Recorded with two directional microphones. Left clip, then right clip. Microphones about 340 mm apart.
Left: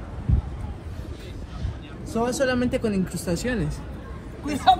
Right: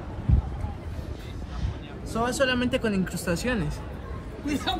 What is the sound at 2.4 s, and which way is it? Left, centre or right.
Speech, right.